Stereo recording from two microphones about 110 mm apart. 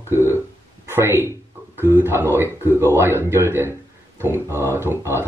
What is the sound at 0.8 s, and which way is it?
Speech, 20° right (ahead or behind).